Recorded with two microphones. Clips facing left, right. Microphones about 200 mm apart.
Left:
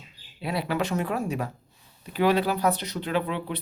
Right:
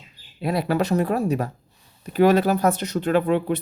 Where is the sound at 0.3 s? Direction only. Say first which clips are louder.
Right 5 dB; 45° right (ahead or behind).